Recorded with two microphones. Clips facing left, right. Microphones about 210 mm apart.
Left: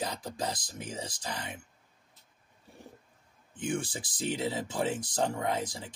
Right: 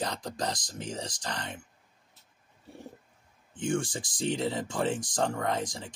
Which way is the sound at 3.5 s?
5° left (ahead or behind).